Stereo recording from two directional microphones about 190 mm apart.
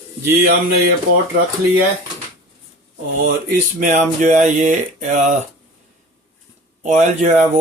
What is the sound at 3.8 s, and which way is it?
Speech, 40° right (ahead or behind).